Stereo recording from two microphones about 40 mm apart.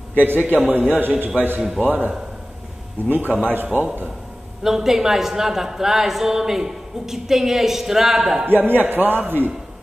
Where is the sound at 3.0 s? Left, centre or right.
Right.